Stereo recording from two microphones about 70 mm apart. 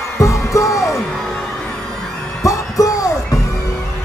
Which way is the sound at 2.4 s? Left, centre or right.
Left.